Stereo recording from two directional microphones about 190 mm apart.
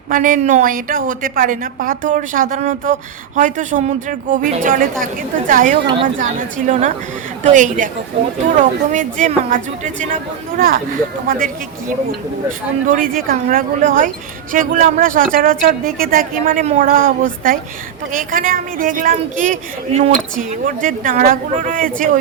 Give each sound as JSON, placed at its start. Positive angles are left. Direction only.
{"t": 0.1, "sound": "a woman's voice", "side_deg": -45}
{"t": 5.8, "sound": "speech", "side_deg": -25}
{"t": 6.1, "sound": "a woman's voice", "side_deg": -45}